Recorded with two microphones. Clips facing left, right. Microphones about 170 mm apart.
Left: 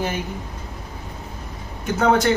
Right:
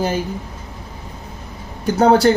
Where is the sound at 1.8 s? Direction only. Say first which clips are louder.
Right 5 dB; 35° right (ahead or behind).